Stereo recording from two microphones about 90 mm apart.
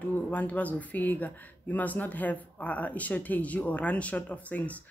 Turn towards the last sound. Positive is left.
turn(degrees=15)  # may be behind; listen again after turning